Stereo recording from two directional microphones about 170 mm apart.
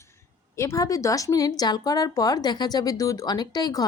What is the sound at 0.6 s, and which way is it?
Speech, 20° left (ahead or behind).